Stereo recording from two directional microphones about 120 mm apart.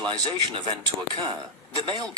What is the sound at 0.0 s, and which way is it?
Speech, 40° right (ahead or behind).